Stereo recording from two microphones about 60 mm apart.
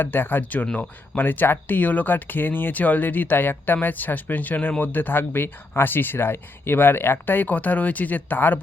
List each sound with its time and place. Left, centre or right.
0.0 s speech: left